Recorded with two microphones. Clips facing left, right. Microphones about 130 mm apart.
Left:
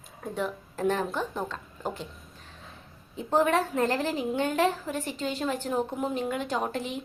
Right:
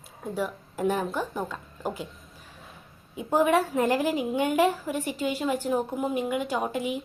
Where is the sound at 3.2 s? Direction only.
10° right (ahead or behind).